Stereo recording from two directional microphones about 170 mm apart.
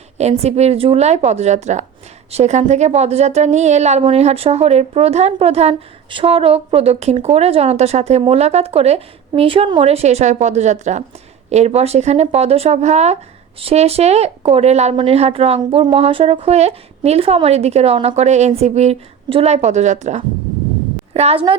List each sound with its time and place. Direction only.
0.2 s a woman's voice: 40° right (ahead or behind)